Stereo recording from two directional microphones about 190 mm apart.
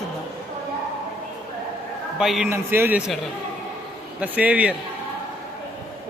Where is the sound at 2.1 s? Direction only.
Centre (ahead or behind).